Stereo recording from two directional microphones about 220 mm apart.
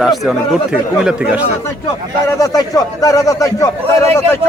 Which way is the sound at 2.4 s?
15° left (ahead or behind).